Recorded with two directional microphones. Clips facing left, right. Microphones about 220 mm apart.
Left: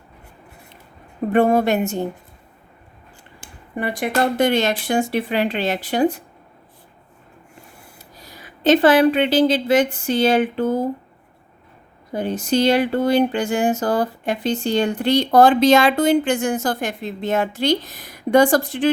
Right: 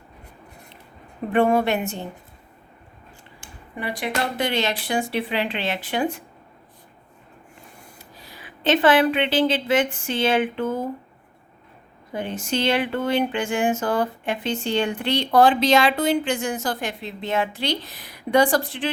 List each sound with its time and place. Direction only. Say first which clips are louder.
1.3 s speech: left 3 dB; 40° left (ahead or behind)
3.8 s speech: left 6 dB; 50° left (ahead or behind)
7.9 s speech: left 2 dB; 40° left (ahead or behind)
12.1 s speech: left 6 dB; 40° left (ahead or behind)